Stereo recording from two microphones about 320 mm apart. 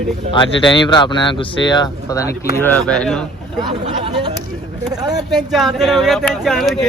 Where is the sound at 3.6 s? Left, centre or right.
Centre.